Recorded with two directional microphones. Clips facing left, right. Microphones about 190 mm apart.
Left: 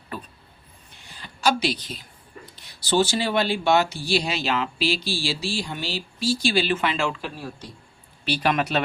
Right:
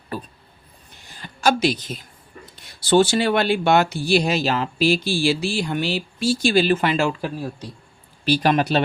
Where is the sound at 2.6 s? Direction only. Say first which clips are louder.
Right 5 dB; 55° right (ahead or behind); by 8.8 s 35° right (ahead or behind).